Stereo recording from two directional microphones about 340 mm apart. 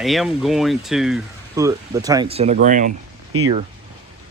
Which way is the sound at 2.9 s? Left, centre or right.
Right.